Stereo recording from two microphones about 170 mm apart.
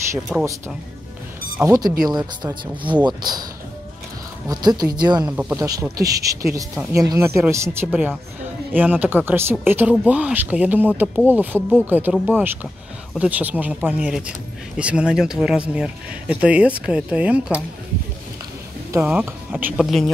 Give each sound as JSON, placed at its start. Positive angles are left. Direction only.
{"t": 0.3, "sound": "speech", "side_deg": -5}
{"t": 1.6, "sound": "speech", "side_deg": -20}
{"t": 4.5, "sound": "speech", "side_deg": -25}
{"t": 5.3, "sound": "speech", "side_deg": -10}
{"t": 18.9, "sound": "speech", "side_deg": -10}